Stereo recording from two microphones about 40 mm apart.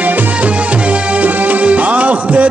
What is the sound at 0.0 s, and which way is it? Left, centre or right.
Music, right.